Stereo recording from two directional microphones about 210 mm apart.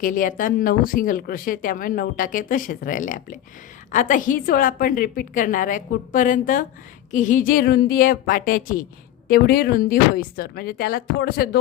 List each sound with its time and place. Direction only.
0.0 s a woman's voice: 40° left (ahead or behind)